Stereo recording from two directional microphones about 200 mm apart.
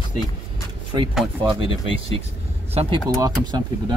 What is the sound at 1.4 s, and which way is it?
Speech, 25° right (ahead or behind).